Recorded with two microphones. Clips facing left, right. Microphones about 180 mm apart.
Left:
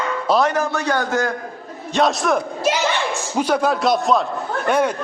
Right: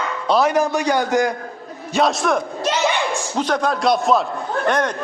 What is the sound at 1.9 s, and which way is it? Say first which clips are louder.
A man's voice: even; centre (ahead or behind).